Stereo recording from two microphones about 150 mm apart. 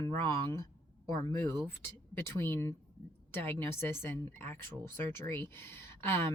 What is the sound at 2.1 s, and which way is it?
Speech, 15° left (ahead or behind).